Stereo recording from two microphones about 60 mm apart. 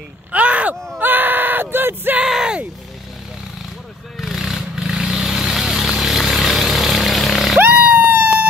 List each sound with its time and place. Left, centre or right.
0.3 s speech: right
0.9 s yell: right
2.2 s speech: centre
4.2 s vehicle: centre
7.5 s music: right